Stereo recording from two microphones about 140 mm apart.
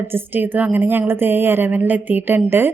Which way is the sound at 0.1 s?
15° right (ahead or behind).